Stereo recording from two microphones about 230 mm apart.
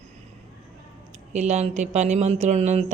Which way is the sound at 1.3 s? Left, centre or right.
Right.